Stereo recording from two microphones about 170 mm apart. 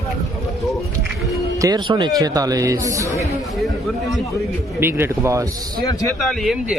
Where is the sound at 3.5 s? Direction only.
Centre (ahead or behind).